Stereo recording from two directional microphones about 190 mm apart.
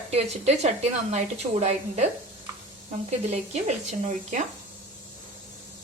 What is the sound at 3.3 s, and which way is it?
A woman's voice, 35° right (ahead or behind).